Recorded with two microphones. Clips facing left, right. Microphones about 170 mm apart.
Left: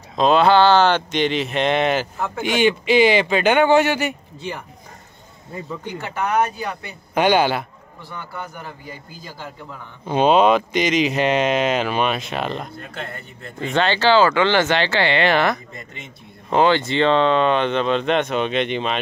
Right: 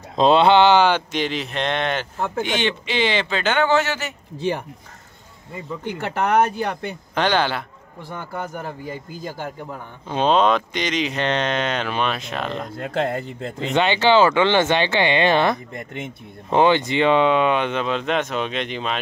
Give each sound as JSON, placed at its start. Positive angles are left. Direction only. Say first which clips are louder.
{"t": 0.1, "sound": "speech", "louder": "even", "side_deg": -25}
{"t": 2.1, "sound": "speech", "louder": "right 2 dB", "side_deg": -30}
{"t": 2.4, "sound": "speech", "louder": "left 10 dB", "side_deg": 10}
{"t": 5.9, "sound": "speech", "louder": "right 3 dB", "side_deg": -60}
{"t": 7.2, "sound": "speech", "louder": "left 4 dB", "side_deg": 10}
{"t": 8.1, "sound": "a man's voice", "louder": "right 3 dB", "side_deg": -45}
{"t": 10.0, "sound": "speech", "louder": "left 3 dB", "side_deg": 10}
{"t": 12.7, "sound": "speech", "louder": "right 10 dB", "side_deg": -90}
{"t": 13.7, "sound": "speech", "louder": "even", "side_deg": -15}
{"t": 15.7, "sound": "speech", "louder": "right 7 dB", "side_deg": -60}
{"t": 16.4, "sound": "speech", "louder": "even", "side_deg": -15}